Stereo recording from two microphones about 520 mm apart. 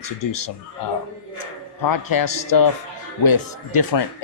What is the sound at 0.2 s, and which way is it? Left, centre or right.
Speech, left.